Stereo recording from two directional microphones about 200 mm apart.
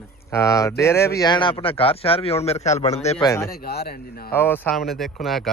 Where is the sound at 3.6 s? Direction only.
50° left (ahead or behind).